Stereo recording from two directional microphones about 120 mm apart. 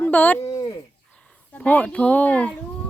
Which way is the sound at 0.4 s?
30° left (ahead or behind).